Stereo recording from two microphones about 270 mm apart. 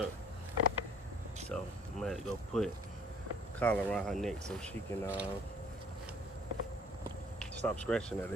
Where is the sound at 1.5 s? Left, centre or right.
Centre.